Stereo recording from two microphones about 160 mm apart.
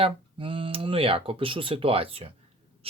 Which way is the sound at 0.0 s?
35° right (ahead or behind).